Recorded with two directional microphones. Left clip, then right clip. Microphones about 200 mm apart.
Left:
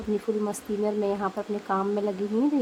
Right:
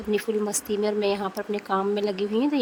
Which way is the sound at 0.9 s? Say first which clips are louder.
Right 1 dB; 40° right (ahead or behind).